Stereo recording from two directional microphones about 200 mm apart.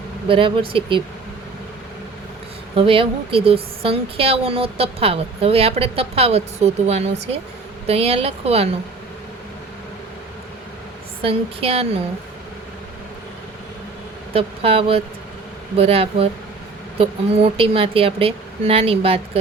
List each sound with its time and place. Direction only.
0.3 s speech: 25° right (ahead or behind)
2.7 s speech: 25° right (ahead or behind)
11.2 s speech: 30° right (ahead or behind)
14.3 s speech: 30° right (ahead or behind)